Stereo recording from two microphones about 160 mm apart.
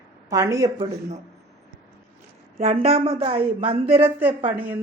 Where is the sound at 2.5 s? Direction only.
45° right (ahead or behind).